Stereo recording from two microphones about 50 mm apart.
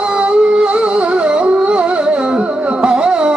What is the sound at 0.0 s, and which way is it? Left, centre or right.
Music, centre.